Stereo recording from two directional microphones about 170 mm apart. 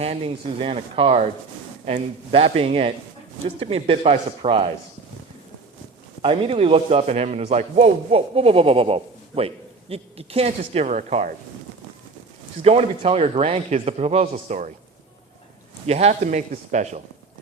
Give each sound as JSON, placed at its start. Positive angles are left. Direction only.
{"t": 0.0, "sound": "a man's voice", "side_deg": -35}
{"t": 6.2, "sound": "a man's voice", "side_deg": -35}
{"t": 12.6, "sound": "a man's voice", "side_deg": -35}
{"t": 15.9, "sound": "a man's voice", "side_deg": -40}